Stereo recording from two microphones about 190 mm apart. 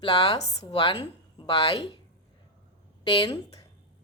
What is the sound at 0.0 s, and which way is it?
A woman's voice, 30° left (ahead or behind).